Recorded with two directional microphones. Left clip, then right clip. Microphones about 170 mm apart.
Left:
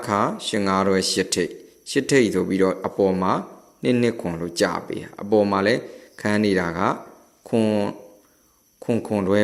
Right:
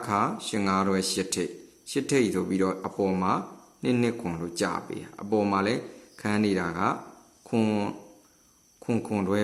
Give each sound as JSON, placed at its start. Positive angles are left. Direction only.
{"t": 0.0, "sound": "speech", "side_deg": 20}